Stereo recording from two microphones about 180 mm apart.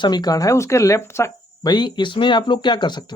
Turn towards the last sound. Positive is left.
turn(degrees=25)  # may be behind; listen again after turning